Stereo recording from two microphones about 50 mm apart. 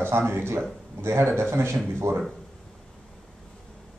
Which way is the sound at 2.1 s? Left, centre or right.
Right.